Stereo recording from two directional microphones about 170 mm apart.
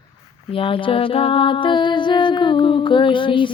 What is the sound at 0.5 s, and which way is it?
Music, 30° left (ahead or behind).